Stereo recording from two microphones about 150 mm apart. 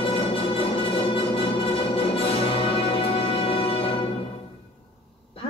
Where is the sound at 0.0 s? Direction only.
40° left (ahead or behind).